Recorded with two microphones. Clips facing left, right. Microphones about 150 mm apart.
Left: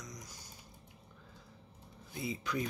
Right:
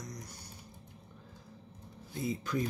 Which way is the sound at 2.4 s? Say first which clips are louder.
Right 1 dB; 45° right (ahead or behind).